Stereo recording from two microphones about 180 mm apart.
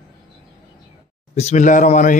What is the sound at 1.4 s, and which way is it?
Speech, 40° left (ahead or behind).